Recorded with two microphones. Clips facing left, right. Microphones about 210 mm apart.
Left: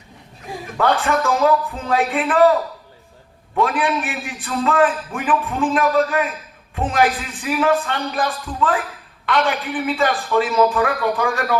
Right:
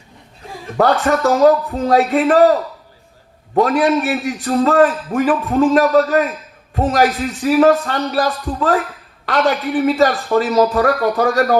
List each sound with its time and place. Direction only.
0.8 s a man's voice: 40° right (ahead or behind)